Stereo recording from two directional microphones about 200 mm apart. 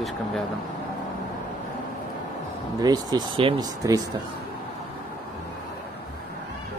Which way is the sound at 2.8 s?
20° right (ahead or behind).